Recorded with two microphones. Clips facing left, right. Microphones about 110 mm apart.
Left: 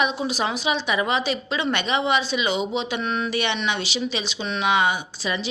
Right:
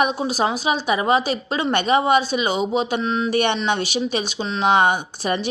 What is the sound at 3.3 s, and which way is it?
Speech, 50° right (ahead or behind).